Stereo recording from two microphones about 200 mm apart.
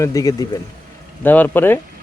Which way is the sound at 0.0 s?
15° left (ahead or behind).